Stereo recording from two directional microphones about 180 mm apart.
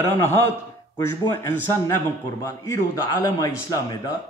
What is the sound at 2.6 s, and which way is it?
Speech, 20° left (ahead or behind).